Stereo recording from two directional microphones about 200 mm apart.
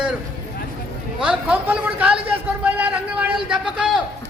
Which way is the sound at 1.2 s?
5° right (ahead or behind).